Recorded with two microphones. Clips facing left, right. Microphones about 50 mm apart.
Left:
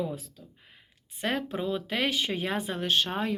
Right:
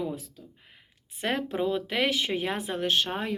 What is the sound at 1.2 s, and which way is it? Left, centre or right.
Speech, right.